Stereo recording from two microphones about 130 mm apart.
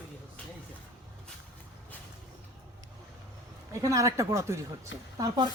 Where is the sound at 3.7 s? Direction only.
25° right (ahead or behind).